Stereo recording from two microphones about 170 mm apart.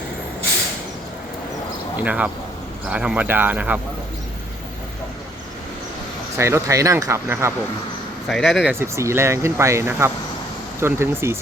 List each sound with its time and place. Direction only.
2.0 s speech: 10° right (ahead or behind)
6.3 s speech: 15° right (ahead or behind)
8.3 s speech: centre (ahead or behind)
8.7 s speech: 15° right (ahead or behind)